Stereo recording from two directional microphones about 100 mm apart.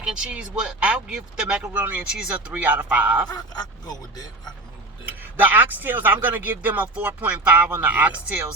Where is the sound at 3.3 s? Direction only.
40° left (ahead or behind).